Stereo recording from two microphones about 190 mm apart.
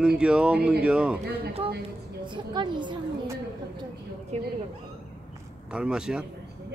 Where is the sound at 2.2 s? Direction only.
25° right (ahead or behind).